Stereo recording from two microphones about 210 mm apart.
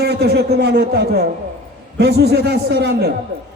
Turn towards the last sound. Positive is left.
turn(degrees=-50)  # may be behind; listen again after turning